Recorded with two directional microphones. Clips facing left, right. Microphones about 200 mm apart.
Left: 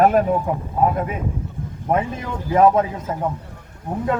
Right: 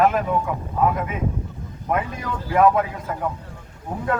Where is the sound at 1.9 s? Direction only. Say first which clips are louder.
Left 3 dB; 25° left (ahead or behind).